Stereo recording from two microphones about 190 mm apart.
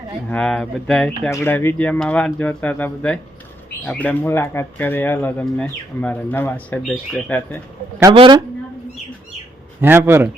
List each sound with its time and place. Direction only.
0.3 s speech: 5° left (ahead or behind)
8.1 s a man's voice: 25° right (ahead or behind)
9.8 s speech: 10° right (ahead or behind)